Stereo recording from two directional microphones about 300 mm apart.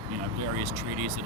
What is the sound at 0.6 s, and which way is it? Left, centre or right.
Speech, right.